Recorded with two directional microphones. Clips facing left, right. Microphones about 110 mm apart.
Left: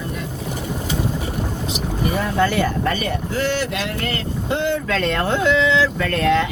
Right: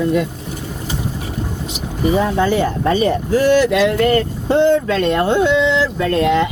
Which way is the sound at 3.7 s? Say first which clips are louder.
Right 11 dB; 55° right (ahead or behind).